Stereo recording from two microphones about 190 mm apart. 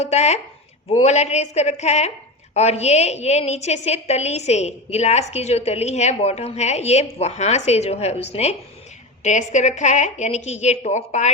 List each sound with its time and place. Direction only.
0.0 s a woman's voice: 35° left (ahead or behind)